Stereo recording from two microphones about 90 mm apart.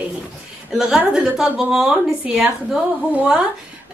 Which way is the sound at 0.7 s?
5° right (ahead or behind).